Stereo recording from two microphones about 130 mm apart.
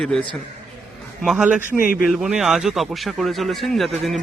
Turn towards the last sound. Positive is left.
turn(degrees=0)  # may be behind; listen again after turning